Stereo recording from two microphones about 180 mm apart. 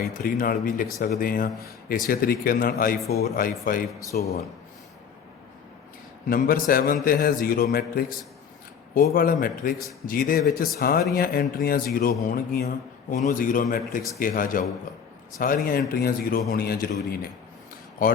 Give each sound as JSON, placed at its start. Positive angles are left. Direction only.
{"t": 0.0, "sound": "a man's voice", "side_deg": 50}
{"t": 6.2, "sound": "a man's voice", "side_deg": 50}
{"t": 9.1, "sound": "a man's voice", "side_deg": 50}